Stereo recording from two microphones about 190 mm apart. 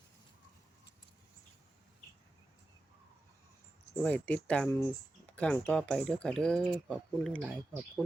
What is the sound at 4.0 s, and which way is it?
Speech, 5° left (ahead or behind).